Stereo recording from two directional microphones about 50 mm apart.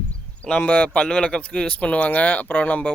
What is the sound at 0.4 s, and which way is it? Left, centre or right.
Speech, left.